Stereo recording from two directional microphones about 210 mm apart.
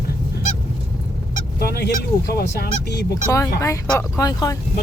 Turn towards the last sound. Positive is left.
turn(degrees=15)  # may be behind; listen again after turning